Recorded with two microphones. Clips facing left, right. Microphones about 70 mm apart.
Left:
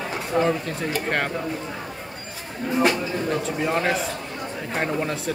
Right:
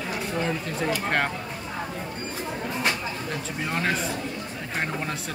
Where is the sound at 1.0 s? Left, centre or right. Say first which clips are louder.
Left 1 dB; centre.